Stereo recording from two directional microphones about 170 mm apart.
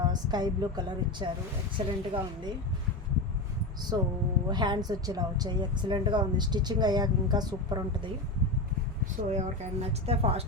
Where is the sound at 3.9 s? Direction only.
25° right (ahead or behind).